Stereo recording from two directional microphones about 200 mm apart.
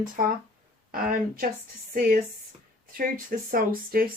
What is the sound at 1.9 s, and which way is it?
A woman's voice, 45° right (ahead or behind).